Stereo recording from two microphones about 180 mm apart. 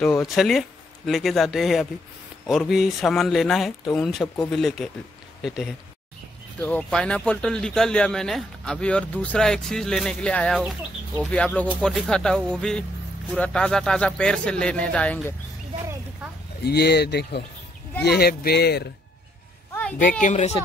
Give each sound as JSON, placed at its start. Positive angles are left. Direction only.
{"t": 0.0, "sound": "speech", "side_deg": 15}
{"t": 0.4, "sound": "speech", "side_deg": 0}
{"t": 6.6, "sound": "speech", "side_deg": 5}
{"t": 16.6, "sound": "speech", "side_deg": 65}
{"t": 20.2, "sound": "speech", "side_deg": 40}